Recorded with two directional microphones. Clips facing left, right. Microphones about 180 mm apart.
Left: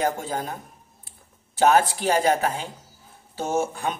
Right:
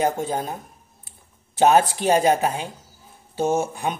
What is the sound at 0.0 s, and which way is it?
Speech, 20° right (ahead or behind).